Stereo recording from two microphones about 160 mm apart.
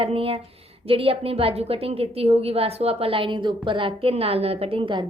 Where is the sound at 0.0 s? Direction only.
35° right (ahead or behind).